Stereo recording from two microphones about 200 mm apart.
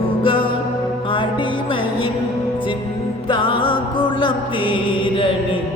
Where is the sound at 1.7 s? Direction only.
25° left (ahead or behind).